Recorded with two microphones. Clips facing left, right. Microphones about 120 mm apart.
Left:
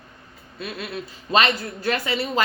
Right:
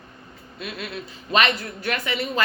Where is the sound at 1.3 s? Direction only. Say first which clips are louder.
Left 1 dB; 35° left (ahead or behind).